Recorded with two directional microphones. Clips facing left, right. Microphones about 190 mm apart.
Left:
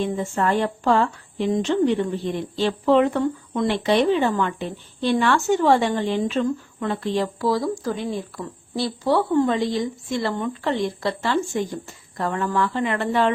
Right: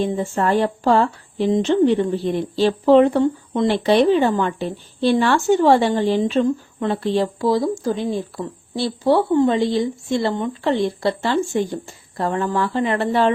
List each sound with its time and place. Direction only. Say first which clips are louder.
0.0 s a woman's voice: right 3 dB; 35° right (ahead or behind)